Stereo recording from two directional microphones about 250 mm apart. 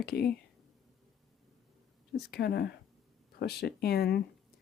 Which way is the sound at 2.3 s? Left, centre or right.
Left.